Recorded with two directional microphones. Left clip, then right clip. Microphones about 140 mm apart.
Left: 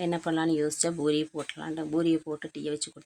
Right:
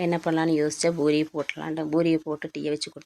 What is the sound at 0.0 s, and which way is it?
Speech, 20° right (ahead or behind).